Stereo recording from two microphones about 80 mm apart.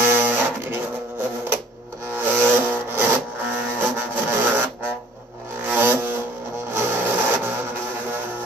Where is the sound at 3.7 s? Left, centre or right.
Right.